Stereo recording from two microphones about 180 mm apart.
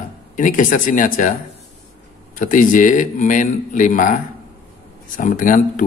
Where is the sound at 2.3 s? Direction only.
45° left (ahead or behind).